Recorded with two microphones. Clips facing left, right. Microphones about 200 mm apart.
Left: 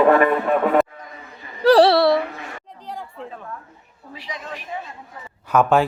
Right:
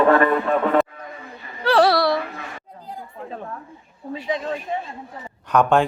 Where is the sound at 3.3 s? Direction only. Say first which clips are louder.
Right 3 dB; 35° right (ahead or behind).